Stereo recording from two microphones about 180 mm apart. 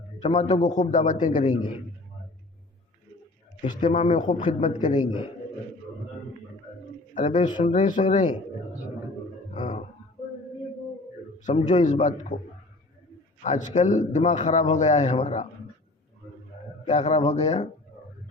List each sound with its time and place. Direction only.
0.2 s a man's voice: 35° left (ahead or behind)
3.8 s speech: 45° left (ahead or behind)
4.9 s a man's voice: 25° left (ahead or behind)
7.1 s speech: 45° left (ahead or behind)
9.6 s a sound: 40° left (ahead or behind)
11.6 s a man's voice: 40° left (ahead or behind)
13.4 s a man's voice: 40° left (ahead or behind)
16.8 s a man's voice: 40° left (ahead or behind)